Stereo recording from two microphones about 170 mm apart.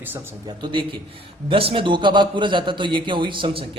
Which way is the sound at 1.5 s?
30° right (ahead or behind).